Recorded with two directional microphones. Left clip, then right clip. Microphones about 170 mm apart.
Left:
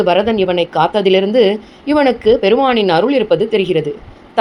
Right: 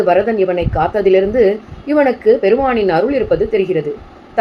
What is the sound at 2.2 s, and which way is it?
Speech, 50° left (ahead or behind).